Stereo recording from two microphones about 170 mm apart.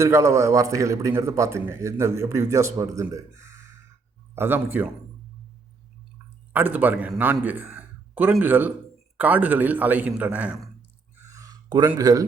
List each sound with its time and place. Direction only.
0.0 s a man's voice: 15° right (ahead or behind)
6.5 s a man's voice: 10° right (ahead or behind)
11.2 s a sound: 20° right (ahead or behind)